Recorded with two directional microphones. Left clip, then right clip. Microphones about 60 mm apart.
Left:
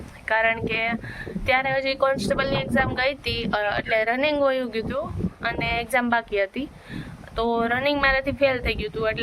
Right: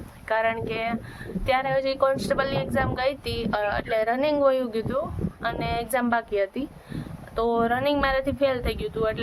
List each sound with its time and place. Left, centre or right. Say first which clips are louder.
0.3 s speech: left 3 dB; right